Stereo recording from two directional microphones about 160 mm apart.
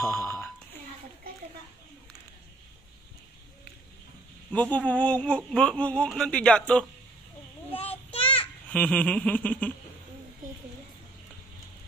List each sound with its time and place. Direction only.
0.0 s a sound: 15° left (ahead or behind)
4.5 s speech: 10° left (ahead or behind)
8.1 s child singing: 35° left (ahead or behind)
8.6 s speech: 10° left (ahead or behind)